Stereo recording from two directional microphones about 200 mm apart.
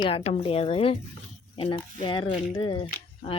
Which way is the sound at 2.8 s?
30° left (ahead or behind).